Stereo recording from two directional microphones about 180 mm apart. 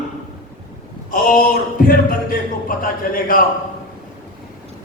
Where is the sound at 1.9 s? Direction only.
50° left (ahead or behind).